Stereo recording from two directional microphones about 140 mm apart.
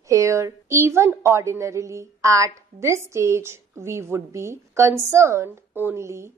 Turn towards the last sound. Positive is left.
turn(degrees=-20)  # may be behind; listen again after turning